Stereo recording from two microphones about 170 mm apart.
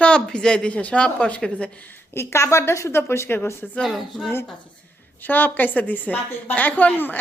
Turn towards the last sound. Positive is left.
turn(degrees=10)  # may be behind; listen again after turning